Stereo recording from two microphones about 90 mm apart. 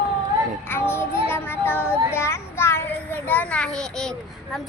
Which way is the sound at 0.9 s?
25° left (ahead or behind).